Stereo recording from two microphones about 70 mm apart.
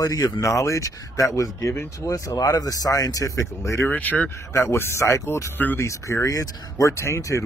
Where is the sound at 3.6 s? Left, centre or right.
Left.